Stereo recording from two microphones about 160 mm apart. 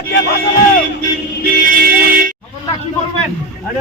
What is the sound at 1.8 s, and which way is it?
Music, 65° right (ahead or behind).